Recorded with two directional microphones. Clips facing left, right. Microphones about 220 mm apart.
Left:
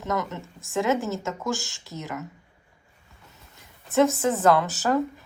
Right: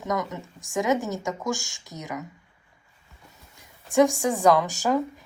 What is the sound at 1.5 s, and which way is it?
Speech, centre (ahead or behind).